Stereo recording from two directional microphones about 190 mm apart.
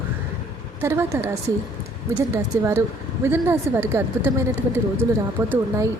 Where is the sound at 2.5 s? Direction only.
15° right (ahead or behind).